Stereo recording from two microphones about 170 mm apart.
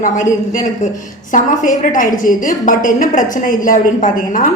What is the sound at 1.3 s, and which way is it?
A woman's voice, 50° left (ahead or behind).